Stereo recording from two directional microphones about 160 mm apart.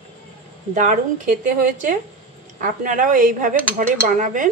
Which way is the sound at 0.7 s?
50° right (ahead or behind).